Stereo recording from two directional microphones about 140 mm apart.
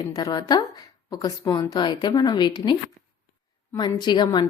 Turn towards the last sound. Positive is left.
turn(degrees=35)  # may be behind; listen again after turning